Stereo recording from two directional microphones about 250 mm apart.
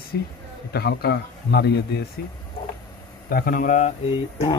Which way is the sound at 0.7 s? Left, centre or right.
Left.